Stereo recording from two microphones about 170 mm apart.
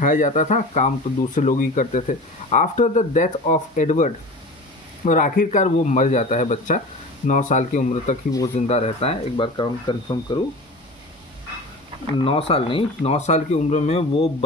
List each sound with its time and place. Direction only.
0.0 s speech: 50° left (ahead or behind); by 10.4 s 25° left (ahead or behind)
12.2 s speech: 35° left (ahead or behind)